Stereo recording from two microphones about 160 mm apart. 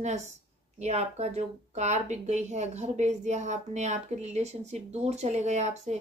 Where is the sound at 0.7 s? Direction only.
45° right (ahead or behind).